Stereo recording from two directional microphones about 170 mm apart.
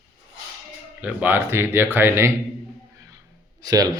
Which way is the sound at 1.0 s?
10° right (ahead or behind).